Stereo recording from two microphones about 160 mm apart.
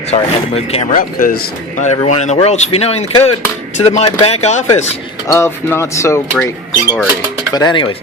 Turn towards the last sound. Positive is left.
turn(degrees=30)  # may be behind; listen again after turning